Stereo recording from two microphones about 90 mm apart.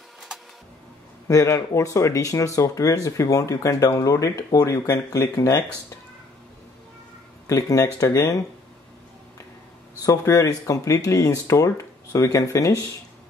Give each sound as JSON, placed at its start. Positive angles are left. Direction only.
{"t": 1.2, "sound": "speech", "side_deg": 35}
{"t": 7.4, "sound": "speech", "side_deg": 40}
{"t": 10.0, "sound": "speech", "side_deg": 35}